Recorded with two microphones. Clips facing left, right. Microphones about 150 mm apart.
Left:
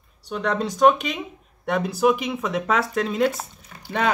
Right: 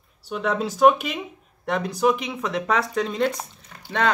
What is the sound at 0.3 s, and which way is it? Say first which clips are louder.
A man's voice: even; 5° right (ahead or behind).